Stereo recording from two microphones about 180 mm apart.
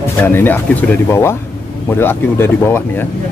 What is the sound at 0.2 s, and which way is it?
Speech, 10° left (ahead or behind).